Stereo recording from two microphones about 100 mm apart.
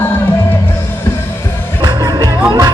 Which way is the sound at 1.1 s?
25° left (ahead or behind).